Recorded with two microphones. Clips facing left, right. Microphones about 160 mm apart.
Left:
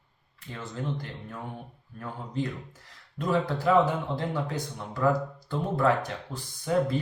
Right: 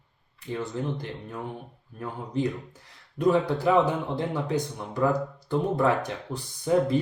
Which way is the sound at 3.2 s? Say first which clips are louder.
Right 4 dB; 15° right (ahead or behind).